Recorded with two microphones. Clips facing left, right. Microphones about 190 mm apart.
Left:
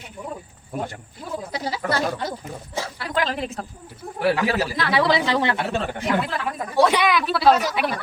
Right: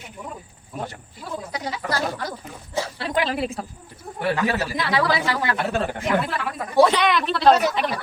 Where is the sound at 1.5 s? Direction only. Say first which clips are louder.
Left 3 dB; 30° left (ahead or behind).